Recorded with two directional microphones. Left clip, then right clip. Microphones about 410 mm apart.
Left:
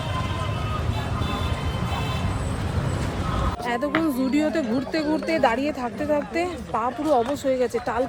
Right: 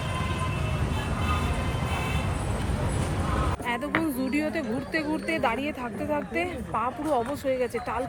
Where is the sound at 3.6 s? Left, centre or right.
Centre.